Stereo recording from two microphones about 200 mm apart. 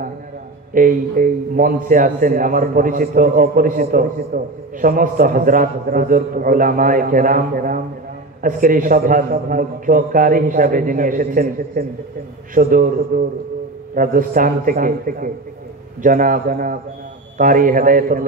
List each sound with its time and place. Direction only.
0.7 s a man's voice: 45° right (ahead or behind)